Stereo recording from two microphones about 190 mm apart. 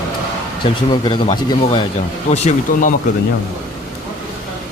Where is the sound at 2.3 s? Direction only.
35° left (ahead or behind).